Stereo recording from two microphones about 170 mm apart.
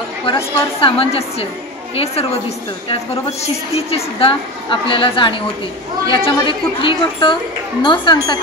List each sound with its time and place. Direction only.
0.3 s a woman's voice: 30° left (ahead or behind)
2.9 s a woman's voice: 40° left (ahead or behind)